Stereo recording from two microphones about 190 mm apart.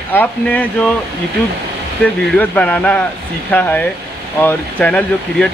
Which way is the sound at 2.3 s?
5° left (ahead or behind).